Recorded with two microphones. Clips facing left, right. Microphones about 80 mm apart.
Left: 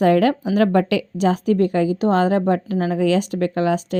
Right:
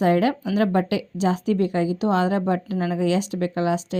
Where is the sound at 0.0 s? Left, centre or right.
Left.